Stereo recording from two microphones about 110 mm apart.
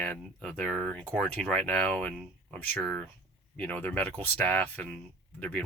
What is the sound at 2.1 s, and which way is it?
Speech, centre (ahead or behind).